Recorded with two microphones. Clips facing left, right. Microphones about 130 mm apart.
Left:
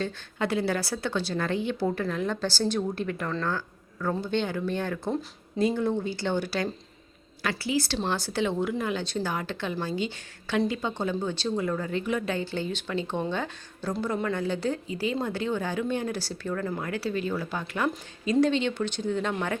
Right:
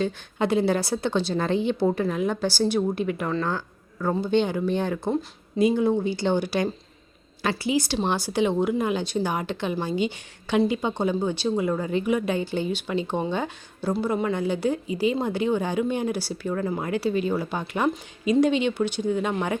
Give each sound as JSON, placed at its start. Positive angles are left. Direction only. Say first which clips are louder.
{"t": 0.0, "sound": "a woman's voice", "louder": "right 5 dB", "side_deg": -20}